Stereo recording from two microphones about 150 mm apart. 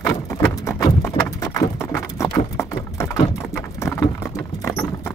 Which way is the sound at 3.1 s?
20° left (ahead or behind).